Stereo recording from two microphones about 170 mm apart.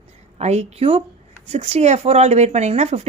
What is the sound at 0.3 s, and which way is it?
A woman's voice, 40° right (ahead or behind).